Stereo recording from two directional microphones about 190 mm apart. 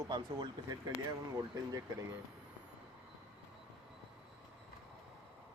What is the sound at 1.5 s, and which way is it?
Speech, 20° right (ahead or behind).